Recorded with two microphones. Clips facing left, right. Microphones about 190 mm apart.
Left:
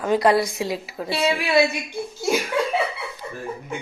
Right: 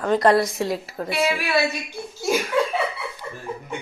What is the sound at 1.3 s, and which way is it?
Speech, 25° left (ahead or behind).